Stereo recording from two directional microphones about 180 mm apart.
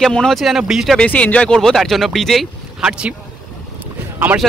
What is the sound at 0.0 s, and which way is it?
Speech, centre (ahead or behind).